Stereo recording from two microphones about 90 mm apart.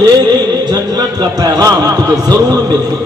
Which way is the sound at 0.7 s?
45° right (ahead or behind).